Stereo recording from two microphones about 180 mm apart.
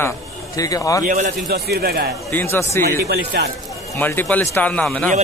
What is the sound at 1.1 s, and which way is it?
A man's voice, 50° right (ahead or behind).